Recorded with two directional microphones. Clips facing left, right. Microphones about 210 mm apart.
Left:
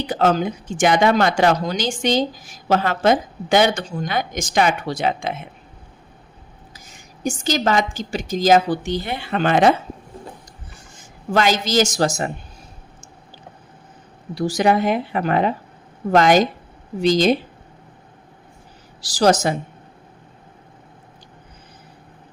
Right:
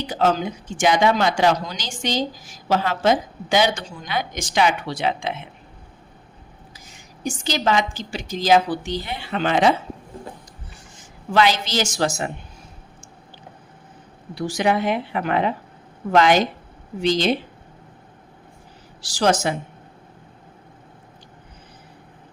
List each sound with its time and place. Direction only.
0.1 s a woman's voice: 55° left (ahead or behind)
7.4 s a woman's voice: 45° left (ahead or behind)
11.3 s a woman's voice: 45° left (ahead or behind)
14.3 s a woman's voice: 40° left (ahead or behind)
19.0 s a woman's voice: 40° left (ahead or behind)